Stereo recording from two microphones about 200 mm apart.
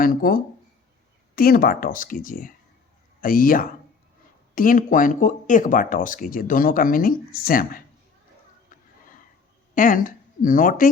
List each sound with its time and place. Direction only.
0.0 s speech: 45° left (ahead or behind)
9.7 s a woman's voice: 45° left (ahead or behind)